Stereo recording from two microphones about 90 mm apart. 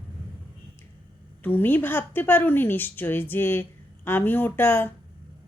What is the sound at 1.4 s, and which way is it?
A woman's voice, 25° left (ahead or behind).